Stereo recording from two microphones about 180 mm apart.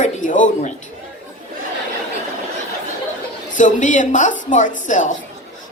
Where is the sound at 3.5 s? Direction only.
45° left (ahead or behind).